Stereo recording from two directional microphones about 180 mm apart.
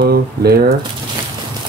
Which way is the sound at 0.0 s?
60° right (ahead or behind).